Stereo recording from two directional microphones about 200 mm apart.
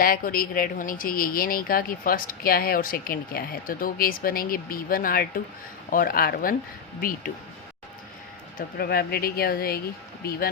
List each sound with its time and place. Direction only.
0.0 s speech: 45° left (ahead or behind)
8.5 s speech: 50° left (ahead or behind)